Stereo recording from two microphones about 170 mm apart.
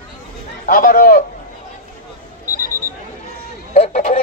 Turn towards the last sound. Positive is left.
turn(degrees=40)  # may be behind; listen again after turning